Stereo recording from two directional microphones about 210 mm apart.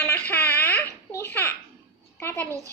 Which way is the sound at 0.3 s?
10° left (ahead or behind).